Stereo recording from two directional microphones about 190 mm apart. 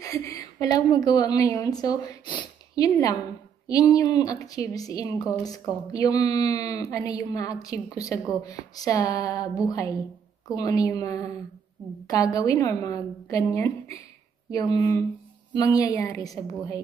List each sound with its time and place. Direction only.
0.2 s a woman's voice: 15° left (ahead or behind)